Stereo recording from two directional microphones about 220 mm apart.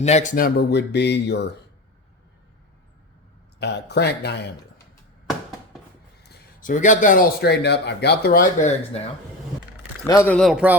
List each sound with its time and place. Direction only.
0.0 s speech: 30° left (ahead or behind); by 1.5 s 50° left (ahead or behind)
3.6 s speech: 50° left (ahead or behind)
6.2 s speech: 35° left (ahead or behind)
10.1 s a man's voice: 10° left (ahead or behind)